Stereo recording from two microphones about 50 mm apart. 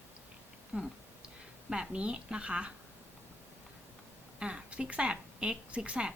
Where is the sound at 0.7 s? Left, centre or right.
Right.